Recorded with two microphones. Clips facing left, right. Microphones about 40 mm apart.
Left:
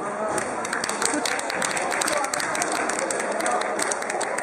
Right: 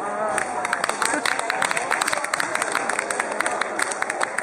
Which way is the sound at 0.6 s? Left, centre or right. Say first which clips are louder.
Right 3 dB; right.